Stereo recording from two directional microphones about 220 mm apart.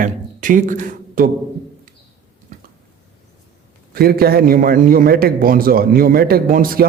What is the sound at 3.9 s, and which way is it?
A man's voice, 45° right (ahead or behind).